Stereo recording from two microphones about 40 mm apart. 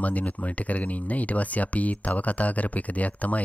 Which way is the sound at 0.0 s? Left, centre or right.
Left.